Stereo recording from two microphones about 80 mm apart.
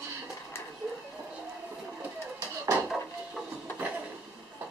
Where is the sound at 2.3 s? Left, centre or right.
Right.